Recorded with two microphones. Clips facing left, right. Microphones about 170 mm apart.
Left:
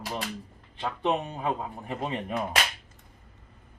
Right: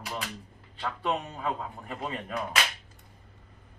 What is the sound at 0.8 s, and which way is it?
A man's voice, 20° left (ahead or behind).